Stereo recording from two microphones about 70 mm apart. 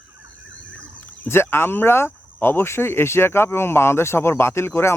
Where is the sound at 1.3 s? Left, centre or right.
Left.